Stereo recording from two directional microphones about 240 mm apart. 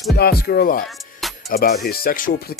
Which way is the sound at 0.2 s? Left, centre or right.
Left.